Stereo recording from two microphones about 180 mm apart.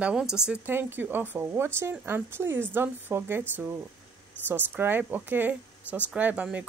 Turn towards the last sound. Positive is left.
turn(degrees=-10)  # may be behind; listen again after turning